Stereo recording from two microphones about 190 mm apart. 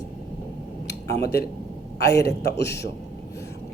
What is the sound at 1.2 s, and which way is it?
A man's voice, 55° left (ahead or behind).